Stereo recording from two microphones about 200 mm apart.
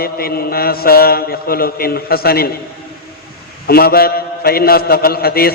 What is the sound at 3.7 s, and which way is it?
A man's voice, 50° left (ahead or behind).